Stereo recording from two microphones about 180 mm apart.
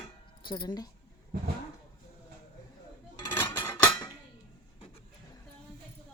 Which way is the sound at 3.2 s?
15° left (ahead or behind).